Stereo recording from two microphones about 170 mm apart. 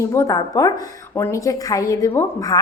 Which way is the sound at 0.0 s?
15° left (ahead or behind).